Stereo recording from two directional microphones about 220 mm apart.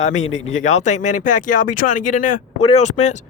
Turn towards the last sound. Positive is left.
turn(degrees=30)  # may be behind; listen again after turning